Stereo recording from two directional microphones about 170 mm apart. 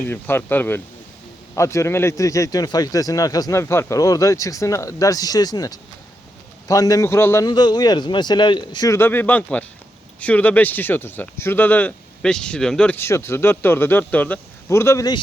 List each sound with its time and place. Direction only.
0.1 s a man's voice: 10° left (ahead or behind)